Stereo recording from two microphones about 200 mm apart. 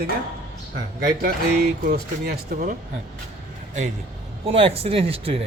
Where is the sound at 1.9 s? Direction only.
50° right (ahead or behind).